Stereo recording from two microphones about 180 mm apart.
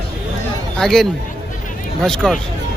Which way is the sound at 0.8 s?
Centre (ahead or behind).